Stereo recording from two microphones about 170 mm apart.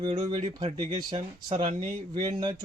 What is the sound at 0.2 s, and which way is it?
Speech, 25° right (ahead or behind).